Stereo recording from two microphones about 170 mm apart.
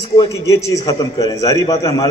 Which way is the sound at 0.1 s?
20° left (ahead or behind).